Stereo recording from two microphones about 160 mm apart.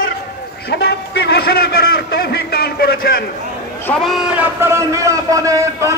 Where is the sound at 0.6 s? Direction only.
90° left; by 3.0 s 75° left (ahead or behind).